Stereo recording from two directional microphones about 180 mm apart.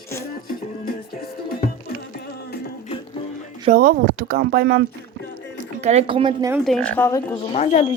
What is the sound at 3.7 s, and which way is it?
Speech, 55° right (ahead or behind).